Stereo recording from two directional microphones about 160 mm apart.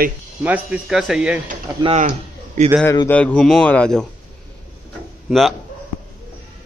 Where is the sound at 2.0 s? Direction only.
50° right (ahead or behind).